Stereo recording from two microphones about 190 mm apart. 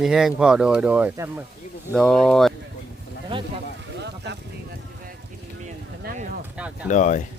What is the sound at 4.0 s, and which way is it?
Boat, 65° right (ahead or behind).